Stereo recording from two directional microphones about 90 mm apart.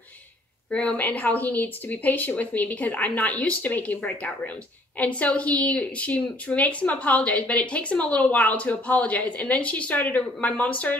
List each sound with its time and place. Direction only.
0.7 s speech: 15° left (ahead or behind)